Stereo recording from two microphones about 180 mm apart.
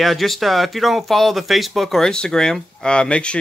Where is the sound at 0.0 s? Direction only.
Centre (ahead or behind).